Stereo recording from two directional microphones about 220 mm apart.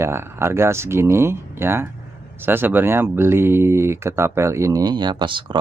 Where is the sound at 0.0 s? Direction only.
10° right (ahead or behind).